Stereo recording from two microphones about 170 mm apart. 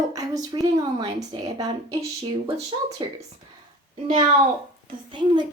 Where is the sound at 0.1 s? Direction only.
20° right (ahead or behind).